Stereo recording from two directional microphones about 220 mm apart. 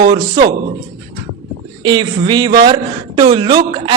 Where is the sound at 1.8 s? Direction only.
20° right (ahead or behind).